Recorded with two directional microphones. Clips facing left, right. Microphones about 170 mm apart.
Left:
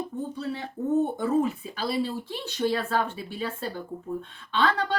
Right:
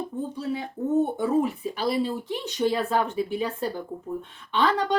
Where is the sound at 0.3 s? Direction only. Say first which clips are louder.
Right 2 dB; 10° right (ahead or behind).